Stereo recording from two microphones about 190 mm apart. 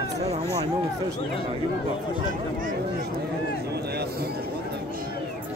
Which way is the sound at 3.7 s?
60° right (ahead or behind).